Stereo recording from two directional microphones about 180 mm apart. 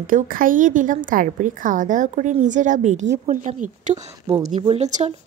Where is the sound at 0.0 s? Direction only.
50° right (ahead or behind).